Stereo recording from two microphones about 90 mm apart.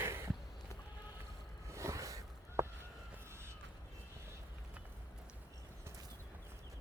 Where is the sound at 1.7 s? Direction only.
35° right (ahead or behind).